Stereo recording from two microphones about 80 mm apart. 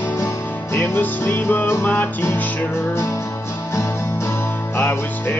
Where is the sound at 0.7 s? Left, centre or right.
Left.